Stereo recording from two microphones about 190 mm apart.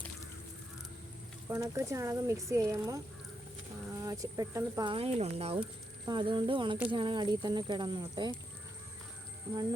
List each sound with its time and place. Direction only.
1.5 s speech: 15° right (ahead or behind)
4.0 s speech: 20° right (ahead or behind)
4.9 s speech: 30° right (ahead or behind)